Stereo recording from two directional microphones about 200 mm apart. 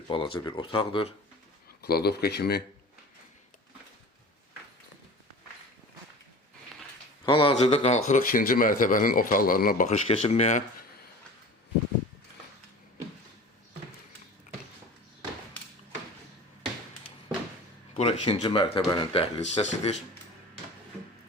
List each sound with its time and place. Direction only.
0.1 s speech: 25° left (ahead or behind)
1.8 s speech: 50° left (ahead or behind)
7.3 s speech: 25° left (ahead or behind)
17.9 s speech: 30° left (ahead or behind)